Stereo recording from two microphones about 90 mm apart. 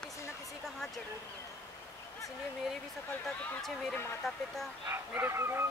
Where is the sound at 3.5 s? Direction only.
5° left (ahead or behind).